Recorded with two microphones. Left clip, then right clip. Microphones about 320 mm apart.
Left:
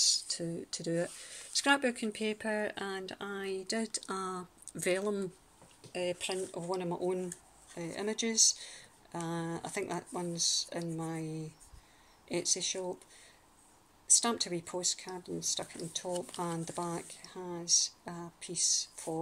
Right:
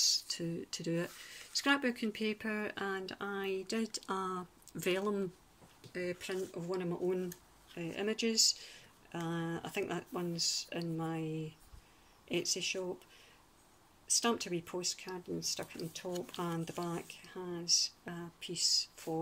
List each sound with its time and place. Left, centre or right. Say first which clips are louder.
0.0 s speech: left 2 dB; centre
10.3 s speech: left 4 dB; right
10.7 s speech: left 1 dB; centre
14.0 s speech: left 3 dB; centre